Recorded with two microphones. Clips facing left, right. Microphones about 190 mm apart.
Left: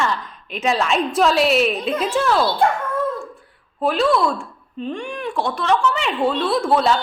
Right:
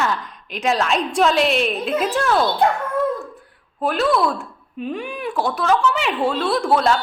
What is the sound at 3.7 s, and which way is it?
Speech, centre (ahead or behind).